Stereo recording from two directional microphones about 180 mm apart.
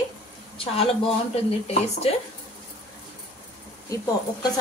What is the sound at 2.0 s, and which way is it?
Speech, 35° left (ahead or behind).